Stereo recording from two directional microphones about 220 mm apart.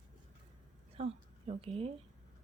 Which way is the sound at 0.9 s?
25° right (ahead or behind).